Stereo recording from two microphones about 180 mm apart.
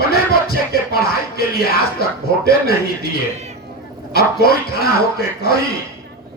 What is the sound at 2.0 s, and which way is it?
Speech, 60° left (ahead or behind).